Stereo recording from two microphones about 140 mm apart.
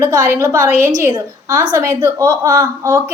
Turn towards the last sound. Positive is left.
turn(degrees=-25)  # may be behind; listen again after turning